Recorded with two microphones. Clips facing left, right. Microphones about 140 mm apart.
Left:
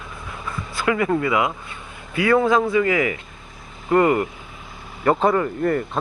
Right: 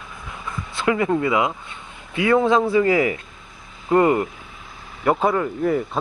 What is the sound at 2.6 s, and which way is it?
Speech, 30° right (ahead or behind).